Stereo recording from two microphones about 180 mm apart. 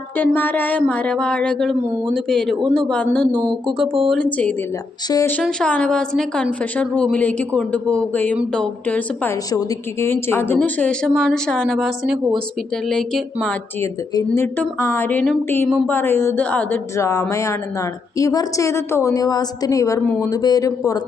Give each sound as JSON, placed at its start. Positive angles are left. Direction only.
{"t": 0.2, "sound": "speech", "side_deg": 10}
{"t": 5.0, "sound": "speech", "side_deg": 20}
{"t": 5.4, "sound": "speech", "side_deg": 5}